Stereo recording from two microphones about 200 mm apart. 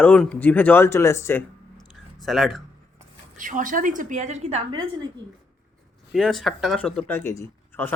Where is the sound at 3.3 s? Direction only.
40° right (ahead or behind).